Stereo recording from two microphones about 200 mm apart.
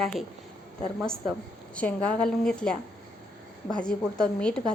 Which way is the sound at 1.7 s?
5° left (ahead or behind).